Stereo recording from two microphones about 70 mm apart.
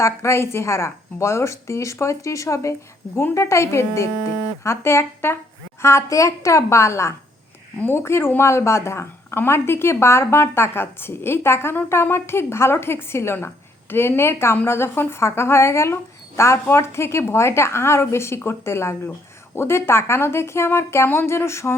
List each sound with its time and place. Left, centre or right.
0.0 s a woman's voice: left